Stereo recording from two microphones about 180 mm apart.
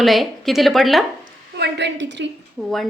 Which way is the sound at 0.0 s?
Centre (ahead or behind).